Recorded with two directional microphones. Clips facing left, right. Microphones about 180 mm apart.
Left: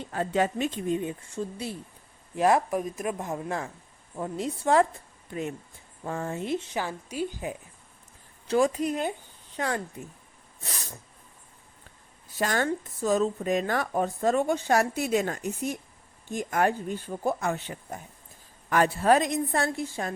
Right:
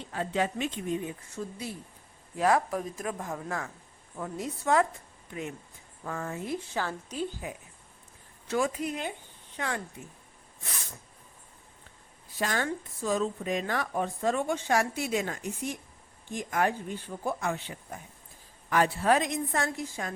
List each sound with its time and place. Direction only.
0.1 s speech: 45° left (ahead or behind); by 4.9 s 30° left (ahead or behind)
6.1 s speech: 30° left (ahead or behind); by 7.3 s 10° left (ahead or behind)
8.4 s speech: 35° left (ahead or behind)
12.4 s speech: 45° left (ahead or behind)